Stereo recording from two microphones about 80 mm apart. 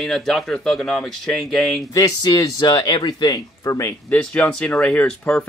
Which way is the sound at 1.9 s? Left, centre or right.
Left.